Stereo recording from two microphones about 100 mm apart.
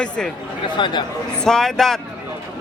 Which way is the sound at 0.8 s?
50° left (ahead or behind).